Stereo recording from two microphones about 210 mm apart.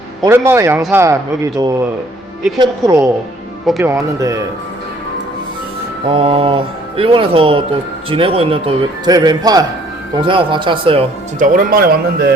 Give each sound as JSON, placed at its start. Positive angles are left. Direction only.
{"t": 0.3, "sound": "speech", "side_deg": -10}
{"t": 6.1, "sound": "speech", "side_deg": -25}
{"t": 11.3, "sound": "speech", "side_deg": -40}